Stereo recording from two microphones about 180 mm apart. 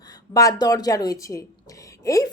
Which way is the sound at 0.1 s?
20° left (ahead or behind).